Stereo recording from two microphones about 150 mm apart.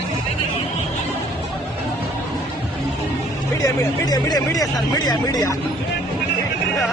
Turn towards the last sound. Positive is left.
turn(degrees=25)  # may be behind; listen again after turning